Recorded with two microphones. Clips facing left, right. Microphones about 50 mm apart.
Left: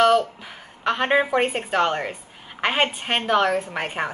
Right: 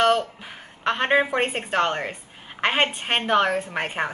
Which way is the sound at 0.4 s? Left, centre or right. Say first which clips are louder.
Left 1 dB; centre.